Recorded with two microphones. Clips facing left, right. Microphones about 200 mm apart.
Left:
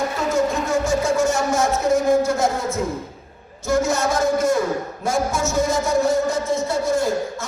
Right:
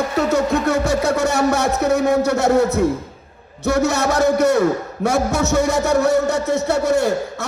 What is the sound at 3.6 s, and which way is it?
A man's voice, 65° right (ahead or behind).